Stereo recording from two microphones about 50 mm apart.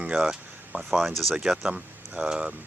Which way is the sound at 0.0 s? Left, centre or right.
Centre.